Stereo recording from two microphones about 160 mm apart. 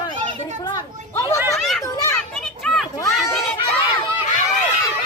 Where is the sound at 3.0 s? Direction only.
20° left (ahead or behind).